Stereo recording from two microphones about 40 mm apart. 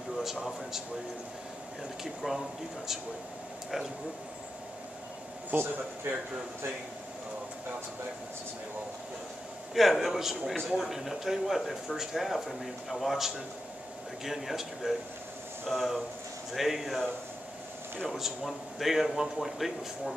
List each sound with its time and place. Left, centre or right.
0.2 s a man's voice: centre
2.2 s a man's voice: centre
5.5 s speech: right
9.8 s a man's voice: centre
18.0 s speech: centre